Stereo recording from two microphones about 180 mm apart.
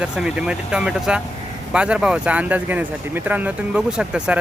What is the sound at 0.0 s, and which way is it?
Speech, 5° right (ahead or behind).